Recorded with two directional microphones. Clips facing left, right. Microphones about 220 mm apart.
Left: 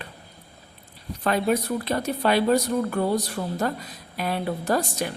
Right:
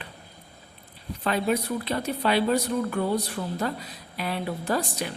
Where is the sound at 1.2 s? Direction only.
50° left (ahead or behind).